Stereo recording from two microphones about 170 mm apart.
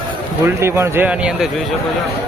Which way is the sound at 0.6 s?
15° right (ahead or behind).